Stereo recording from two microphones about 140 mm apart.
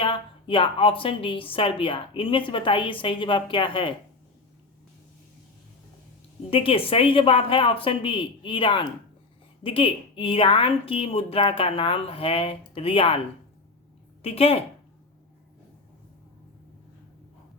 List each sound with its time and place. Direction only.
0.0 s a woman's voice: 40° left (ahead or behind)
6.5 s a woman's voice: 40° left (ahead or behind)